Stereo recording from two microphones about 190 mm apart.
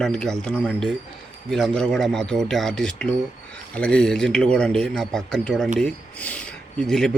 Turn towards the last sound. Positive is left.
turn(degrees=5)  # may be behind; listen again after turning